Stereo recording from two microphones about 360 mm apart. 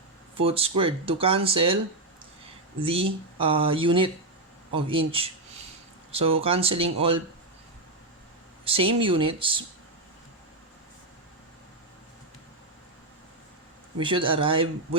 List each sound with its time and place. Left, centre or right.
0.3 s speech: centre
2.8 s speech: centre
8.6 s speech: centre
14.0 s speech: centre